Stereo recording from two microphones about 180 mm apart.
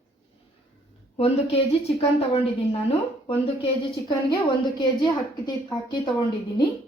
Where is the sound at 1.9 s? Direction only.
35° left (ahead or behind).